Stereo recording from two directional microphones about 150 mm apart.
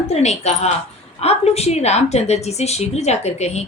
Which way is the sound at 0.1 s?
45° left (ahead or behind).